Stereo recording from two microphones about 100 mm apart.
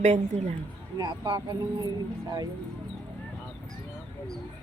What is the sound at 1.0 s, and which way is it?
Speech, 50° right (ahead or behind).